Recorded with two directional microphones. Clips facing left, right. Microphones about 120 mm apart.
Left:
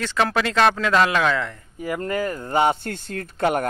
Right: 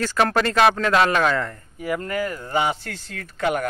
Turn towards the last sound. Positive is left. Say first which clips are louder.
# left 2 dB
turn(degrees=35)  # may be behind; listen again after turning